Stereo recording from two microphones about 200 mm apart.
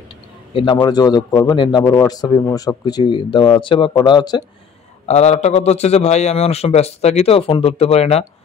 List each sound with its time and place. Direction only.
0.5 s a man's voice: 25° left (ahead or behind)
5.0 s a man's voice: 35° left (ahead or behind)